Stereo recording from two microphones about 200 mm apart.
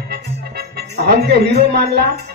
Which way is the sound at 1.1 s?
55° right (ahead or behind).